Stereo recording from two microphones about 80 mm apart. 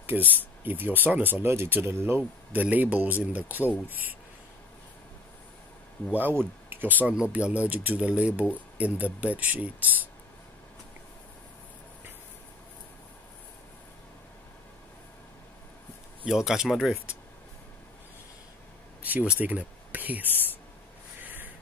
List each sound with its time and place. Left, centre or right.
0.0 s speech: right
6.1 s speech: right
16.3 s speech: centre
19.0 s speech: centre
21.2 s a sound: right